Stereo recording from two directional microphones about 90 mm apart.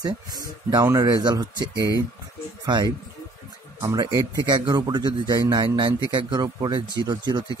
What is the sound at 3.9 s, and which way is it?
A man's voice, 45° right (ahead or behind).